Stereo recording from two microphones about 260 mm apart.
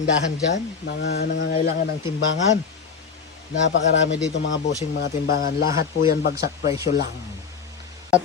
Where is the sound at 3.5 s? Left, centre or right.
Left.